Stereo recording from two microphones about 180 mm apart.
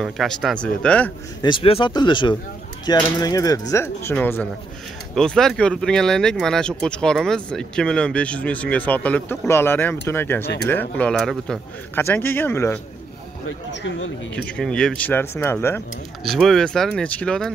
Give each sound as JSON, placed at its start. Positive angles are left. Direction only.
{"t": 0.0, "sound": "speech", "side_deg": 0}
{"t": 1.4, "sound": "a man's voice", "side_deg": 30}
{"t": 14.3, "sound": "a man's voice", "side_deg": 5}
{"t": 16.3, "sound": "speech", "side_deg": 0}